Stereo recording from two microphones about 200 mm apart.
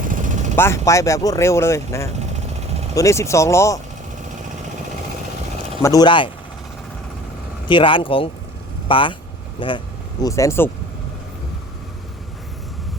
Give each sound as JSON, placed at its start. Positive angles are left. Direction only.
{"t": 0.0, "sound": "vehicle", "side_deg": -40}
{"t": 0.5, "sound": "speech", "side_deg": 10}
{"t": 5.8, "sound": "speech", "side_deg": 20}
{"t": 7.7, "sound": "speech", "side_deg": 25}